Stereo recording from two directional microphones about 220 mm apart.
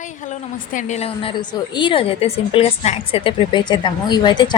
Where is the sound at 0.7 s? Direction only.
30° left (ahead or behind).